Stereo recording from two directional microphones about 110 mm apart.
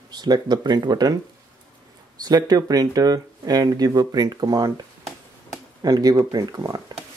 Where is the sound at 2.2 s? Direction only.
35° right (ahead or behind).